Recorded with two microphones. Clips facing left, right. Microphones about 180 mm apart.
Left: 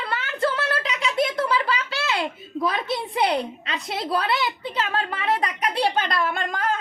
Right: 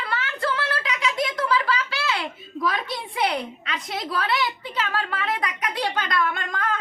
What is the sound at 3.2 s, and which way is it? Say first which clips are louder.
A woman's voice: even; 30° left (ahead or behind).